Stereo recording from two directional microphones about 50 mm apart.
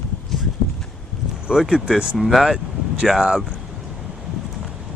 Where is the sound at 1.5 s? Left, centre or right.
Centre.